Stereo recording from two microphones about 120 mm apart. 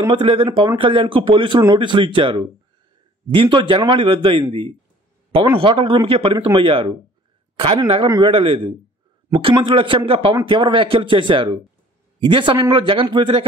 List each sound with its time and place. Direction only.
0.0 s a man's voice: 45° right (ahead or behind)